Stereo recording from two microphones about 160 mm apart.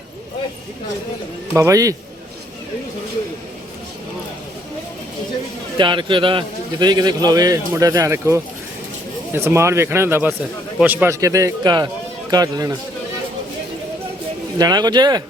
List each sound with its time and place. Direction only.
1.5 s a man's voice: 20° right (ahead or behind)
5.7 s a man's voice: 30° right (ahead or behind)
14.6 s a man's voice: 25° right (ahead or behind)